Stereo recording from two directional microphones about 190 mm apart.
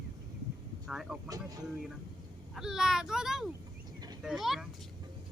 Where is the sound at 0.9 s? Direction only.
Centre (ahead or behind).